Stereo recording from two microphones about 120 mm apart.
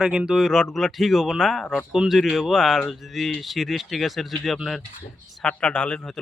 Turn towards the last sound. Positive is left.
turn(degrees=10)  # may be behind; listen again after turning